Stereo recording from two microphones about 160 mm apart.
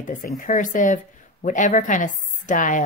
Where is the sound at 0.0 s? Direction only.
60° left (ahead or behind).